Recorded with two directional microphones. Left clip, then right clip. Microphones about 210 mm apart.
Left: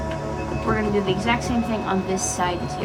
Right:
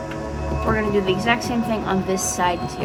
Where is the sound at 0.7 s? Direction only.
30° right (ahead or behind).